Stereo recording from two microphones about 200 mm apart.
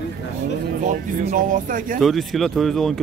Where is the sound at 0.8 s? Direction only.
40° right (ahead or behind).